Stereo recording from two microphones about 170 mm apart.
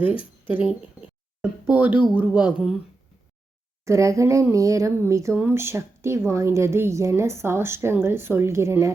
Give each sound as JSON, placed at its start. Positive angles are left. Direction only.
{"t": 0.0, "sound": "speech", "side_deg": -10}
{"t": 1.7, "sound": "speech", "side_deg": -10}
{"t": 3.8, "sound": "speech", "side_deg": -20}